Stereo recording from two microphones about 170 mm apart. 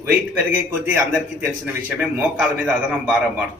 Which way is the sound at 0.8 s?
10° right (ahead or behind).